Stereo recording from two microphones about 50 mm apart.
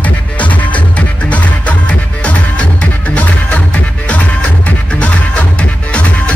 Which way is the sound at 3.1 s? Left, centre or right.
Left.